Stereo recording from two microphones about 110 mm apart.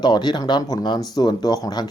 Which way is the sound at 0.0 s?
40° left (ahead or behind).